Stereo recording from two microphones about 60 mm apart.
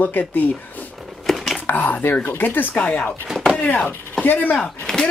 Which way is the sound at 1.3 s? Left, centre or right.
Centre.